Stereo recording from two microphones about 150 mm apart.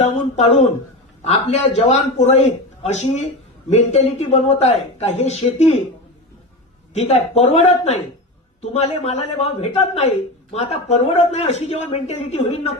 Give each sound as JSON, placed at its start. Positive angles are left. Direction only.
{"t": 0.0, "sound": "a man's voice", "side_deg": 45}
{"t": 6.9, "sound": "a man's voice", "side_deg": 45}